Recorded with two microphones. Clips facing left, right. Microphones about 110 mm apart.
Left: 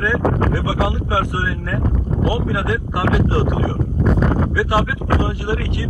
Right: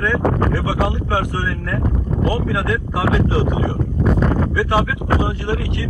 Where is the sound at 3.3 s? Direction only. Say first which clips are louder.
Even; 15° right (ahead or behind).